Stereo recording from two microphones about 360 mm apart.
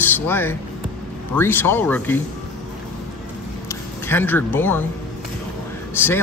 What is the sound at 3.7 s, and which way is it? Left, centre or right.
Speech, centre.